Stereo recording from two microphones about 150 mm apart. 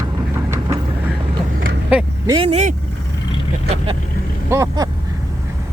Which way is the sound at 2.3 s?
45° right (ahead or behind).